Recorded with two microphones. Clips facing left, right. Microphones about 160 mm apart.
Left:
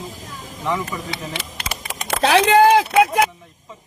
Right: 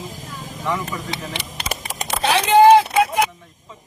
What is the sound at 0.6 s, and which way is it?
Speech, centre (ahead or behind).